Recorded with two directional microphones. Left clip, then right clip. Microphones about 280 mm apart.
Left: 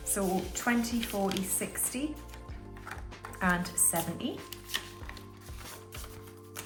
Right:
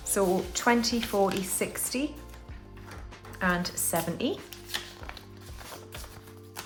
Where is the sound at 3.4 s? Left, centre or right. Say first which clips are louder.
Right 1 dB; centre.